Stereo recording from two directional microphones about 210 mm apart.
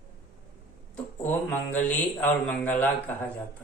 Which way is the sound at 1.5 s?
10° left (ahead or behind).